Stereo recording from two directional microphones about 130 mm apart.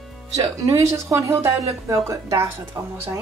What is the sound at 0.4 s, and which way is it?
A woman's voice, 25° right (ahead or behind).